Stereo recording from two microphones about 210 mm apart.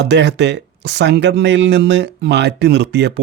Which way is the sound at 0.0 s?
55° right (ahead or behind).